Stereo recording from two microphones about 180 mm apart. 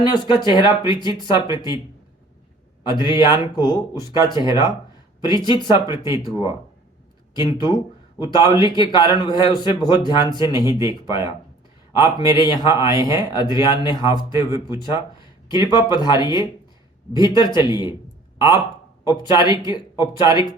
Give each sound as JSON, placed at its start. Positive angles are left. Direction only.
{"t": 0.0, "sound": "a man's voice", "side_deg": 25}
{"t": 2.8, "sound": "a man's voice", "side_deg": 25}
{"t": 12.6, "sound": "speech", "side_deg": -15}
{"t": 13.0, "sound": "a man's voice", "side_deg": 25}